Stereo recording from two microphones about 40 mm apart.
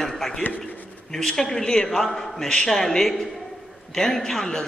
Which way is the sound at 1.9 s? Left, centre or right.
Centre.